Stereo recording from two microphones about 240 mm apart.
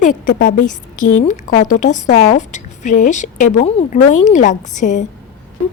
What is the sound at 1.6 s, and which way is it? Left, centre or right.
A woman's voice, left.